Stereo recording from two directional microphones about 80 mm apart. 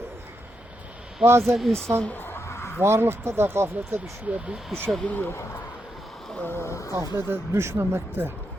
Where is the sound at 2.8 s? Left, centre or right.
Right.